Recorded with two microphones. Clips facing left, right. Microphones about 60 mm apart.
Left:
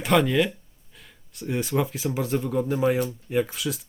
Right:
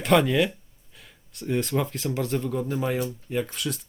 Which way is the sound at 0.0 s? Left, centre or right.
Centre.